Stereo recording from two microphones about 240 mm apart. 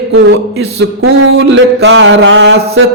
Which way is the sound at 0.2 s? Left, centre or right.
Right.